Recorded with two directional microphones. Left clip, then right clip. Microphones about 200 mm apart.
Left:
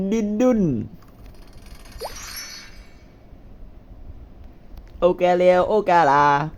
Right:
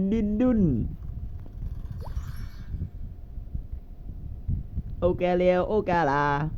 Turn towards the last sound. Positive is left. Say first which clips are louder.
# left 9 dB
turn(degrees=5)  # may be behind; listen again after turning